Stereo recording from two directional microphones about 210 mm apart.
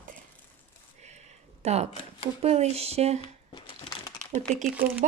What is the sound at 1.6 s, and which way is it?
Speech, 30° right (ahead or behind).